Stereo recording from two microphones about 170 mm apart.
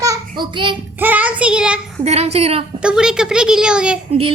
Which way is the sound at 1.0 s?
10° right (ahead or behind).